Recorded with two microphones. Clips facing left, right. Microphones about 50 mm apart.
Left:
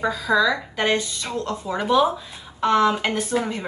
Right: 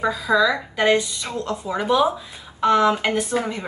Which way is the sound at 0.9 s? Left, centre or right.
Centre.